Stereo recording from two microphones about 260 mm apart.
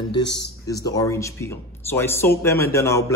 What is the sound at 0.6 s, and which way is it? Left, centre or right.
Speech, centre.